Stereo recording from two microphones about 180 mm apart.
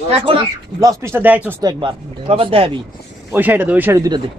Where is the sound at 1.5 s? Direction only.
25° right (ahead or behind).